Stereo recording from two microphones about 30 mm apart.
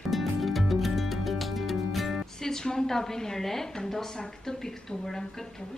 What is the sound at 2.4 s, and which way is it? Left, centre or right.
A woman's voice, left.